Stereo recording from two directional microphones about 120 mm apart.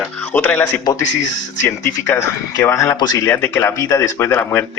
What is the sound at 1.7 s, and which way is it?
A man's voice, 20° left (ahead or behind).